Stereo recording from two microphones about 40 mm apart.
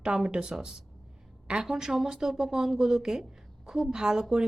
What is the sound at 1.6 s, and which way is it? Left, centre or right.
Speech, centre.